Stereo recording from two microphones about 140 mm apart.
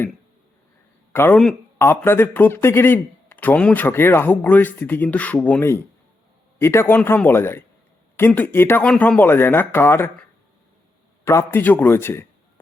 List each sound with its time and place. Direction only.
1.1 s a man's voice: 15° left (ahead or behind)
11.3 s a man's voice: 20° left (ahead or behind)